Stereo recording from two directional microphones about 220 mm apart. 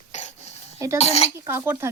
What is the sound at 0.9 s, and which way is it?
Speech, 30° left (ahead or behind).